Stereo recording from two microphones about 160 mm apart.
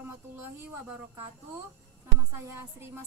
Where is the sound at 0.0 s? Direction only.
15° right (ahead or behind).